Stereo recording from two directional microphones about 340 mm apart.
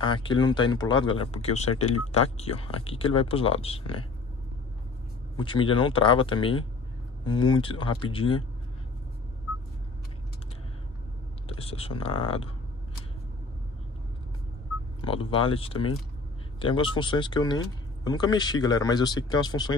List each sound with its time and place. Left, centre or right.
0.0 s speech: centre
5.4 s speech: centre
11.4 s speech: centre
15.0 s speech: centre